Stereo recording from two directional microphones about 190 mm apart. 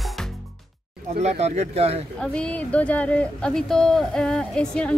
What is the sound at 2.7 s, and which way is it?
Speech, 5° left (ahead or behind).